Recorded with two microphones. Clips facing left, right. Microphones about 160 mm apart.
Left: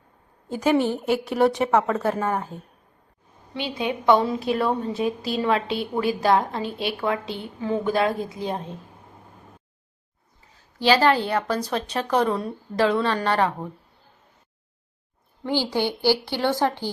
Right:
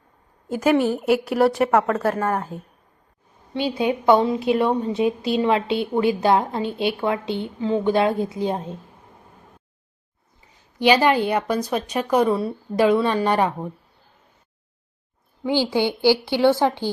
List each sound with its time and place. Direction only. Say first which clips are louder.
0.5 s a woman's voice: right 2 dB; 5° right (ahead or behind)
3.5 s a woman's voice: right 5 dB; 30° right (ahead or behind)
10.8 s a woman's voice: right 2 dB; 15° right (ahead or behind)
15.4 s a woman's voice: right 3 dB; 15° right (ahead or behind)